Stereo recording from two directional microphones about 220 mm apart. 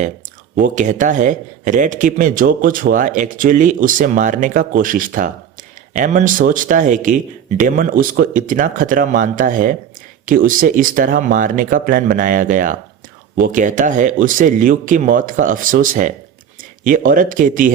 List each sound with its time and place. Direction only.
0.5 s a man's voice: 35° right (ahead or behind)